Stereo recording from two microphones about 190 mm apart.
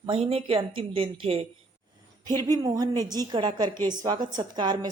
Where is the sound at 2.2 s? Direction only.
20° right (ahead or behind).